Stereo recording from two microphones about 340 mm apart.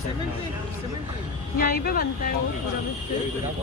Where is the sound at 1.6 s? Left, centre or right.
Left.